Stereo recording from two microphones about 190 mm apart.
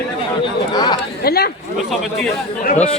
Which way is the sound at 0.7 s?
20° left (ahead or behind).